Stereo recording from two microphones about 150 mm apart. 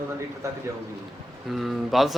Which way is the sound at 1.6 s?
Centre (ahead or behind).